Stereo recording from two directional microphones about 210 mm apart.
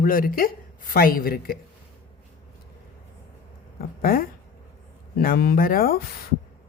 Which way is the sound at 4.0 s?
45° left (ahead or behind).